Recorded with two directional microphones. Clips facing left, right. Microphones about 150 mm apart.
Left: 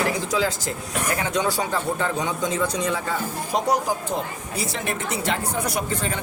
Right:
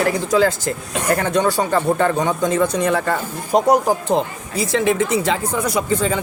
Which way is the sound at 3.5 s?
50° right (ahead or behind).